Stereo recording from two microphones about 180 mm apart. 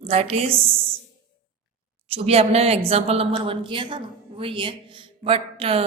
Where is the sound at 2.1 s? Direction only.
35° right (ahead or behind).